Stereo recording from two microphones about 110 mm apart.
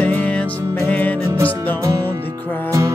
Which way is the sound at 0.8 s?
15° left (ahead or behind).